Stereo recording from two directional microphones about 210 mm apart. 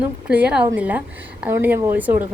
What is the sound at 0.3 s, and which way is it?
A woman's voice, 5° right (ahead or behind).